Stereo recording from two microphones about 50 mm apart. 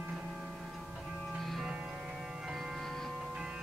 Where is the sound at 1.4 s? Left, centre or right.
Centre.